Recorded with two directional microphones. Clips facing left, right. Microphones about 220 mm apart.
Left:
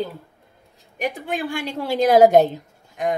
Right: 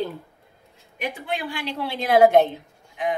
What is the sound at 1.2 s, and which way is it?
A woman's voice, 45° left (ahead or behind).